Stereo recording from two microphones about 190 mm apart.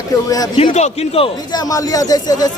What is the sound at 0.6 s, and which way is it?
Speech, 35° left (ahead or behind).